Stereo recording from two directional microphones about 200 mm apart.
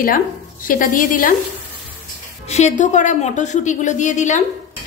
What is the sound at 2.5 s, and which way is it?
A woman's voice, 35° left (ahead or behind).